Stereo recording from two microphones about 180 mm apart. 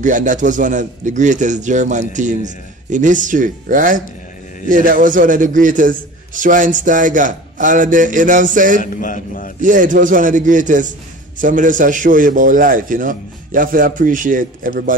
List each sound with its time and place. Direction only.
0.0 s a man's voice: 45° right (ahead or behind)
8.8 s a man's voice: 45° left (ahead or behind)
9.6 s a man's voice: 45° right (ahead or behind)